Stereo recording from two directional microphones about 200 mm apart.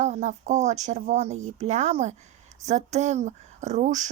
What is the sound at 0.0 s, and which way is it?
Speech, 35° right (ahead or behind).